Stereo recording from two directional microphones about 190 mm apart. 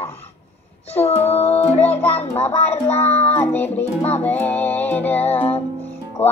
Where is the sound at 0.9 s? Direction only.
35° left (ahead or behind).